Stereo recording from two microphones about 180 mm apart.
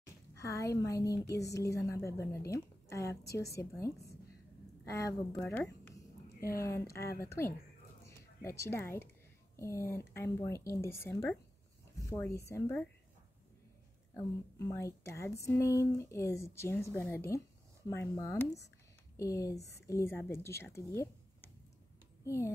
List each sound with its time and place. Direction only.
0.0 s a woman's voice: 15° left (ahead or behind)
5.4 s a woman's voice: 10° left (ahead or behind)
14.1 s a child's voice: 15° left (ahead or behind)